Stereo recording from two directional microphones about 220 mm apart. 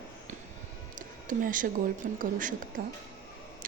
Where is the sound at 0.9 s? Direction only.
35° right (ahead or behind).